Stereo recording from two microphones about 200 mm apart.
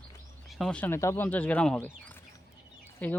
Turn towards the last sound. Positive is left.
turn(degrees=5)  # may be behind; listen again after turning